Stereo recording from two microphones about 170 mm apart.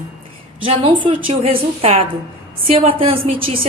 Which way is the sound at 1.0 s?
30° right (ahead or behind).